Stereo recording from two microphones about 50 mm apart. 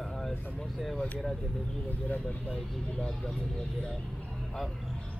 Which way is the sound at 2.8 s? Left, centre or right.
Centre.